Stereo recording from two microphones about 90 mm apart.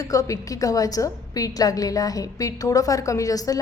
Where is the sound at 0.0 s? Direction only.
40° left (ahead or behind).